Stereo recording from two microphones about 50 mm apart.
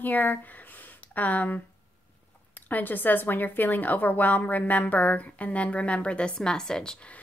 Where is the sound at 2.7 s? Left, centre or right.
Left; by 6.9 s centre.